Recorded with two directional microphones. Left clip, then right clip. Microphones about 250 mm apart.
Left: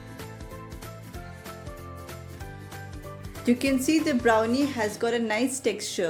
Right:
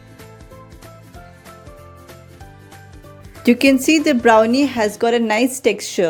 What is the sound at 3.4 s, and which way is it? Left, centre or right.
Speech, right.